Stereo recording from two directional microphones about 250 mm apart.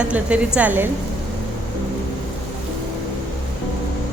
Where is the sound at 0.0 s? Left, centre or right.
Centre.